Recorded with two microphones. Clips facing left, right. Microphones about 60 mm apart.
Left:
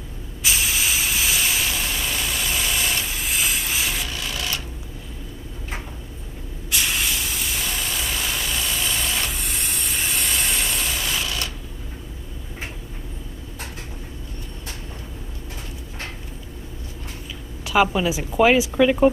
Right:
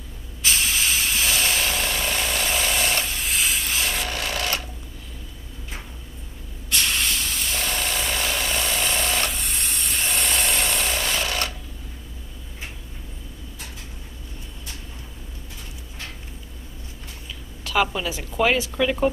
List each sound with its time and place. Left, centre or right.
0.4 s spray: centre
1.9 s engine: right
2.8 s a sound: right
3.1 s hiss: centre
3.9 s wood: right
6.7 s hiss: centre
7.7 s vehicle: right
8.4 s a sound: right
9.3 s steam: centre
10.4 s a sound: centre
10.7 s a sound: right
17.6 s a woman's voice: centre